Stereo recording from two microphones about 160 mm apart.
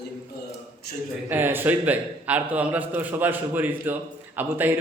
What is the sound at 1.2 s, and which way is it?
A man's voice, 15° right (ahead or behind).